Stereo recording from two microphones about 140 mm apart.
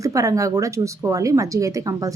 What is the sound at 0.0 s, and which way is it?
A woman's voice, 25° right (ahead or behind).